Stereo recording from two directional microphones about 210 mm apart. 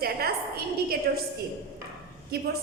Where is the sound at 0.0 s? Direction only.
45° right (ahead or behind).